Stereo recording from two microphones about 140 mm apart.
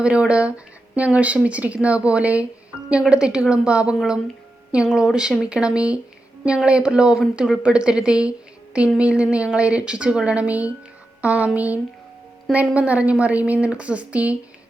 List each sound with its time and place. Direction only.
0.0 s speech: 5° right (ahead or behind)